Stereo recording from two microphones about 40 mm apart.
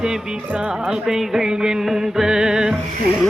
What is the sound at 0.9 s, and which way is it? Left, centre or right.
Music, centre.